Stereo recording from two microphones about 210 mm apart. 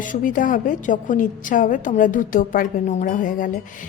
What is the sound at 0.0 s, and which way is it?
A woman's voice, 40° left (ahead or behind).